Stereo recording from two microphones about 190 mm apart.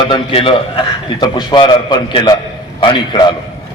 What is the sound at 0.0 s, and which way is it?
A man's voice, 25° left (ahead or behind).